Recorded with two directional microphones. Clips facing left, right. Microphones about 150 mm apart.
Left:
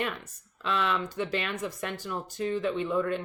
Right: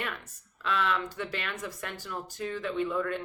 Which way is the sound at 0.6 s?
20° left (ahead or behind).